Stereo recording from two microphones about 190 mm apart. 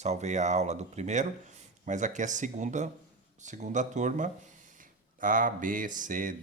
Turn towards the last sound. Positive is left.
turn(degrees=-45)  # may be behind; listen again after turning